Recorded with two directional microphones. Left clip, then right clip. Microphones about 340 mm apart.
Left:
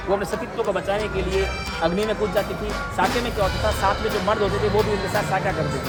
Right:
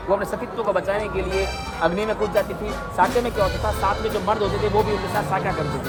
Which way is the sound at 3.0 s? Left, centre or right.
Centre.